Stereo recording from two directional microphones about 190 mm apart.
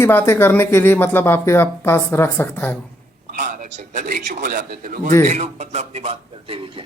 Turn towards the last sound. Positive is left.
turn(degrees=-30)  # may be behind; listen again after turning